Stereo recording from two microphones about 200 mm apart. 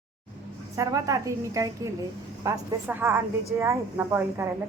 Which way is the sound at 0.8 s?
15° right (ahead or behind).